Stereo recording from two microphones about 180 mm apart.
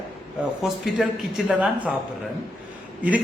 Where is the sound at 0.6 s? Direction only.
5° right (ahead or behind).